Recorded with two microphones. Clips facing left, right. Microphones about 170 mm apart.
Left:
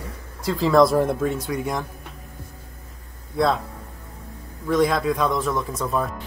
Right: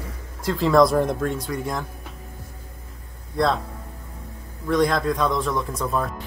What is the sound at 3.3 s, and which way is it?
Speech, 5° left (ahead or behind).